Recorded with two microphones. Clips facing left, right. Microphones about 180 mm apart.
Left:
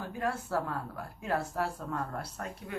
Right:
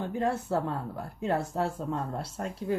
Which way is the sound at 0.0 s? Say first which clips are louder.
Right 5 dB; 25° right (ahead or behind).